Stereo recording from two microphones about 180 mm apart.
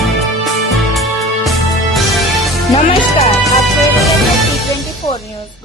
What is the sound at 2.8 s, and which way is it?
Music, 35° left (ahead or behind).